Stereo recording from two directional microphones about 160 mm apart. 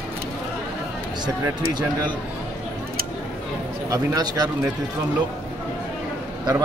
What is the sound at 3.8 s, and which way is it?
Speech, 20° right (ahead or behind).